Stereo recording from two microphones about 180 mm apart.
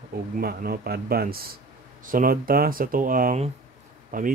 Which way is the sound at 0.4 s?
55° right (ahead or behind).